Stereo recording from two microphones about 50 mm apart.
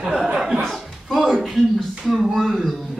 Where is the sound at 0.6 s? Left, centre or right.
Centre.